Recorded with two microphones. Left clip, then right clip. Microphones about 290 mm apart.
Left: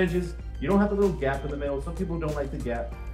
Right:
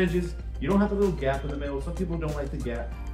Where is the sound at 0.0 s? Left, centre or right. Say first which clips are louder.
Even; centre.